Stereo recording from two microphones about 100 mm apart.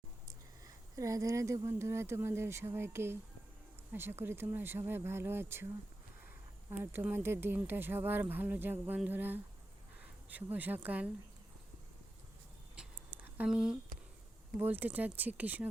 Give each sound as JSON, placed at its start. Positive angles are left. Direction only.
{"t": 0.9, "sound": "speech", "side_deg": -35}
{"t": 6.7, "sound": "speech", "side_deg": -20}
{"t": 10.0, "sound": "a sound", "side_deg": -15}
{"t": 10.8, "sound": "speech", "side_deg": -15}
{"t": 13.1, "sound": "a sound", "side_deg": -20}
{"t": 13.5, "sound": "speech", "side_deg": -5}